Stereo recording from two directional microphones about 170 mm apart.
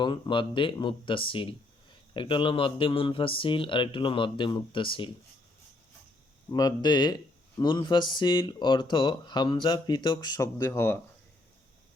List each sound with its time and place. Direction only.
0.0 s speech: 30° left (ahead or behind)
6.5 s speech: 25° left (ahead or behind)